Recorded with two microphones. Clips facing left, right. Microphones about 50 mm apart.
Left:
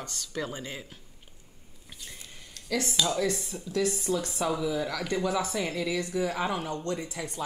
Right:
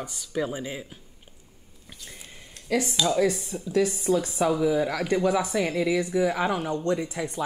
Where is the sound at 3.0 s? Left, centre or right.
Centre.